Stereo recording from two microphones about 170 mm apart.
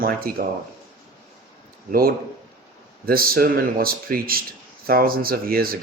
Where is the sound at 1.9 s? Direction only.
60° right (ahead or behind).